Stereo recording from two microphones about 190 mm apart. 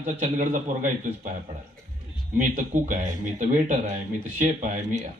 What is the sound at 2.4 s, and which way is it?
Speech, 40° right (ahead or behind).